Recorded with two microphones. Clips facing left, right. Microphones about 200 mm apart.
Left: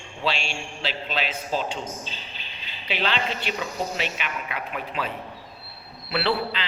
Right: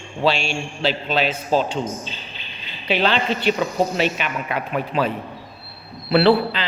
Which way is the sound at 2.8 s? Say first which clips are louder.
Right 7 dB; 45° right (ahead or behind).